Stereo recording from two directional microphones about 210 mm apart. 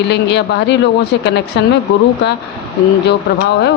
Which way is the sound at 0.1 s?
55° left (ahead or behind).